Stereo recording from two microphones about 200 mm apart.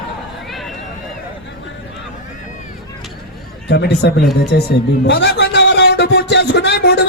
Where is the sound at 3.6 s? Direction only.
55° left (ahead or behind).